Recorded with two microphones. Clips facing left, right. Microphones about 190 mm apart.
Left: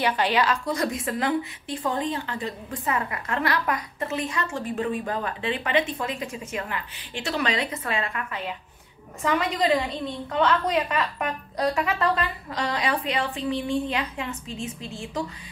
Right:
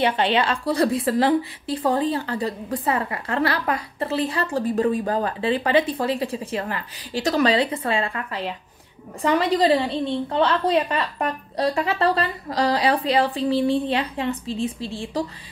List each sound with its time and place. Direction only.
0.0 s a woman's voice: 25° right (ahead or behind)